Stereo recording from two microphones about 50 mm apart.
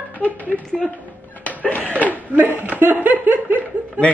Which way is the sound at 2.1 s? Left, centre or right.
Right.